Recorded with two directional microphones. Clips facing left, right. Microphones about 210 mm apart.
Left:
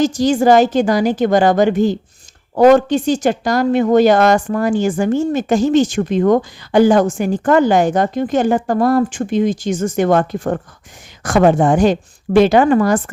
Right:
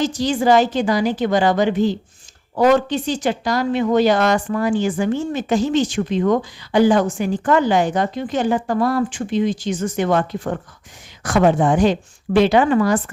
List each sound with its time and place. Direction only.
0.0 s speech: 45° left (ahead or behind)